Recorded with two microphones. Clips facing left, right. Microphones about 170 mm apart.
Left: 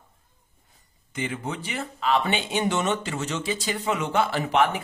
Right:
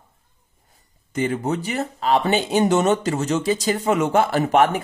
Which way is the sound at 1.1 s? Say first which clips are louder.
Right 8 dB; 40° right (ahead or behind).